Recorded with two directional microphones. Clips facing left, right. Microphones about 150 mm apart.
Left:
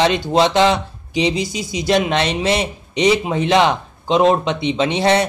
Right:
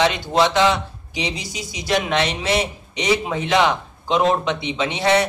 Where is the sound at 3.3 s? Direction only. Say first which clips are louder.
Left 3 dB; 25° left (ahead or behind).